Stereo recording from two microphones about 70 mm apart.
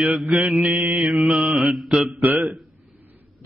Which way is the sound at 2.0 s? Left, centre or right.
Centre.